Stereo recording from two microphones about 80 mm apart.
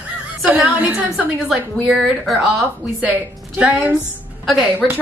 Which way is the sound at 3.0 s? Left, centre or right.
Centre.